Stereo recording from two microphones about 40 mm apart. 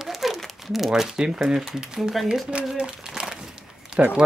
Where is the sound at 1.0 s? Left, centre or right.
Centre.